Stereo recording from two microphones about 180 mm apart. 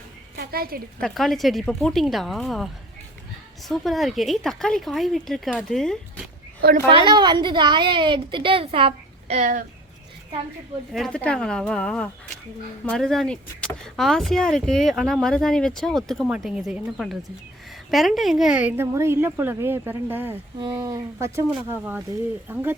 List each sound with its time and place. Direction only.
0.3 s a sound: 55° right (ahead or behind)
0.9 s speech: centre (ahead or behind)
3.7 s speech: centre (ahead or behind)
6.6 s a woman's voice: 60° right (ahead or behind)
6.8 s a woman's voice: 30° right (ahead or behind); by 9.6 s 45° right (ahead or behind)
10.9 s a woman's voice: 5° left (ahead or behind)
20.6 s a woman's voice: 25° right (ahead or behind)